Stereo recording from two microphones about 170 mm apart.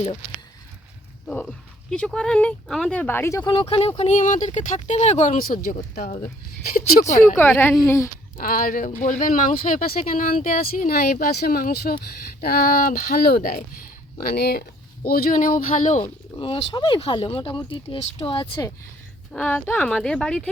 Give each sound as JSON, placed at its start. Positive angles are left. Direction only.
{"t": 1.9, "sound": "speech", "side_deg": 5}
{"t": 3.5, "sound": "speech", "side_deg": 30}
{"t": 5.4, "sound": "speech", "side_deg": 60}
{"t": 7.3, "sound": "speech", "side_deg": 10}
{"t": 8.4, "sound": "speech", "side_deg": 55}
{"t": 16.3, "sound": "speech", "side_deg": 30}
{"t": 19.3, "sound": "speech", "side_deg": 5}